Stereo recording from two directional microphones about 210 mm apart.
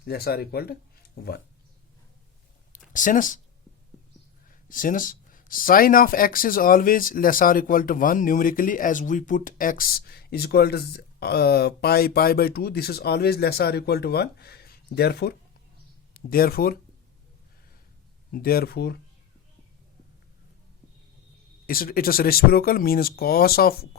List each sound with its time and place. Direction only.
0.0 s speech: 45° left (ahead or behind)
2.7 s speech: 40° left (ahead or behind)
4.4 s speech: 40° left (ahead or behind)
18.3 s speech: 45° left (ahead or behind)
21.7 s speech: 45° left (ahead or behind)